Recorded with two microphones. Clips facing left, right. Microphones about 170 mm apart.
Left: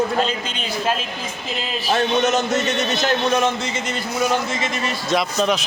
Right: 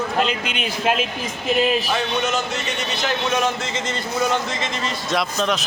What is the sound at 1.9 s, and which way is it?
A man's voice, 45° left (ahead or behind).